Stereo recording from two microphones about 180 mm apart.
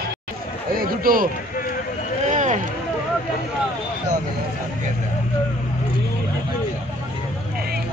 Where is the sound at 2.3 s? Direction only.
40° right (ahead or behind).